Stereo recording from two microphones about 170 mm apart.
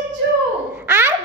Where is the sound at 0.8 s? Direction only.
15° right (ahead or behind).